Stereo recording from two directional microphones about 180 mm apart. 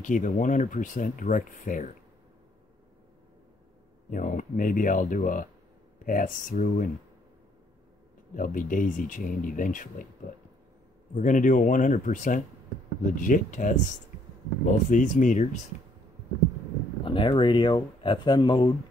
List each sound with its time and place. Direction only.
0.0 s speech: 45° left (ahead or behind)
4.1 s speech: 45° left (ahead or behind)
8.4 s speech: 50° left (ahead or behind)
11.1 s speech: 45° left (ahead or behind)
17.0 s speech: 30° left (ahead or behind)